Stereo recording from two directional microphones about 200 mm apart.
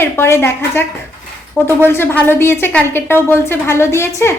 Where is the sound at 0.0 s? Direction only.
10° left (ahead or behind).